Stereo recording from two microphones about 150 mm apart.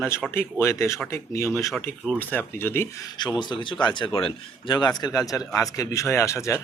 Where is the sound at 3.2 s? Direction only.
30° left (ahead or behind).